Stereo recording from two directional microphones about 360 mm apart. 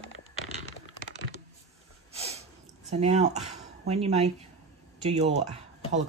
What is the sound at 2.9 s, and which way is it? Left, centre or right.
Speech, centre.